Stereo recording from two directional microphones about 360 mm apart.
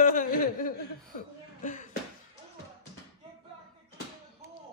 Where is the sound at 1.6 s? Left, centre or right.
Left.